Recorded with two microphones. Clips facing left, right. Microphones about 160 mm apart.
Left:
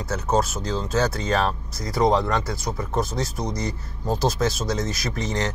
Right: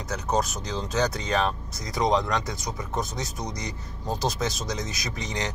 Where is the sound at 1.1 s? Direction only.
20° right (ahead or behind).